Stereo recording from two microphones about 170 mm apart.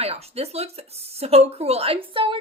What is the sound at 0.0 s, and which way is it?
Speech, 35° right (ahead or behind).